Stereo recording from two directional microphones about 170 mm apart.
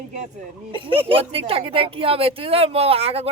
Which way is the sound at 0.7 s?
30° right (ahead or behind).